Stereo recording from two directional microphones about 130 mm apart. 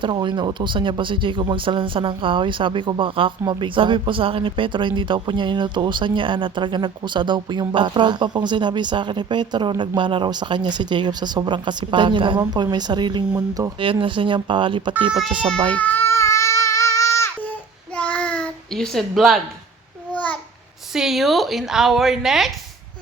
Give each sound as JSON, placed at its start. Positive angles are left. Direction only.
{"t": 0.0, "sound": "speech", "side_deg": -40}
{"t": 13.7, "sound": "speech", "side_deg": -40}
{"t": 15.7, "sound": "baby cry", "side_deg": 15}
{"t": 17.9, "sound": "a sound", "side_deg": 10}
{"t": 20.9, "sound": "speech", "side_deg": -5}